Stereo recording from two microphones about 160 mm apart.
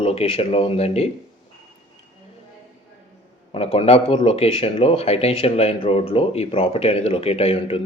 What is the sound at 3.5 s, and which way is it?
Speech, 40° left (ahead or behind).